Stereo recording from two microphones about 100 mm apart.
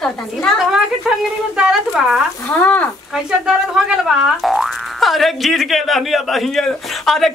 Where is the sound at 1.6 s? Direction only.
5° right (ahead or behind).